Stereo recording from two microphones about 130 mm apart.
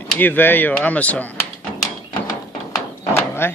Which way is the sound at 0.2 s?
15° left (ahead or behind).